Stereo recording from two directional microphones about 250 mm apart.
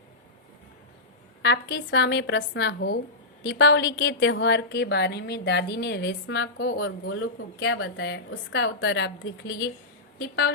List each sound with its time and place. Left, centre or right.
1.4 s a woman's voice: left